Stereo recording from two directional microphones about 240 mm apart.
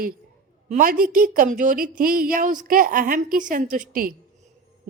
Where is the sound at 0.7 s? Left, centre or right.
Right.